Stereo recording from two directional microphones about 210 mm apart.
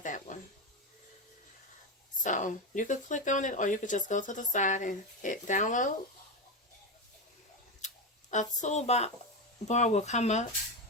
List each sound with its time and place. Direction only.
0.0 s a sound: 35° left (ahead or behind)
2.2 s speech: 35° left (ahead or behind)
8.6 s speech: 30° left (ahead or behind)